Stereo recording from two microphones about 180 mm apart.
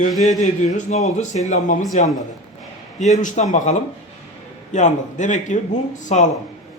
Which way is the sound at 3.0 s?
45° left (ahead or behind).